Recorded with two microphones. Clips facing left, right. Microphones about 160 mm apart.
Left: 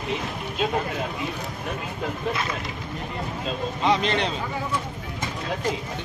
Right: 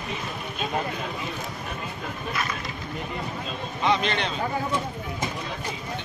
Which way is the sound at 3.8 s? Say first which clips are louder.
Left 2 dB; 30° left (ahead or behind).